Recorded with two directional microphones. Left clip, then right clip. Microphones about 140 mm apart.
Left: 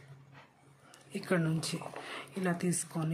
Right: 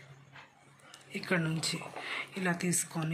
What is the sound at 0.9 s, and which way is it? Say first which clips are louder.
Speech: even; 35° left (ahead or behind).